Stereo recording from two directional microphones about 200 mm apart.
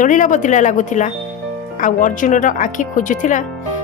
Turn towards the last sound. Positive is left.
turn(degrees=40)  # may be behind; listen again after turning